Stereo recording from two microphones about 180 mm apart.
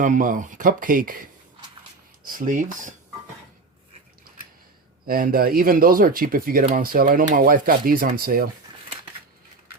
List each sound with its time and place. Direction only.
0.0 s speech: 45° right (ahead or behind)
2.2 s speech: 50° right (ahead or behind)
5.0 s speech: 55° right (ahead or behind)